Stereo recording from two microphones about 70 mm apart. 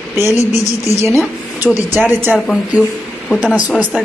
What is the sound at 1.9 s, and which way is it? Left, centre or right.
Speech, right.